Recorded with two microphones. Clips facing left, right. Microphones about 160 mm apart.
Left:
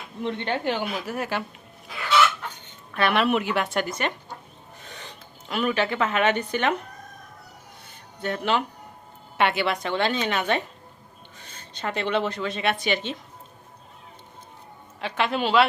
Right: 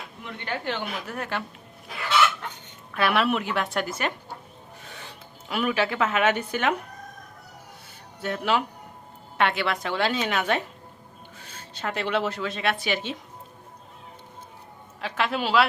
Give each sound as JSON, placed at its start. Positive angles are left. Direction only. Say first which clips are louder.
{"t": 0.2, "sound": "a woman's voice", "louder": "left 7 dB", "side_deg": 30}
{"t": 0.6, "sound": "speech", "louder": "left 4 dB", "side_deg": 10}
{"t": 2.9, "sound": "a woman's voice", "louder": "left 1 dB", "side_deg": -5}
{"t": 8.2, "sound": "a woman's voice", "louder": "even", "side_deg": -5}
{"t": 15.0, "sound": "a woman's voice", "louder": "left 2 dB", "side_deg": 0}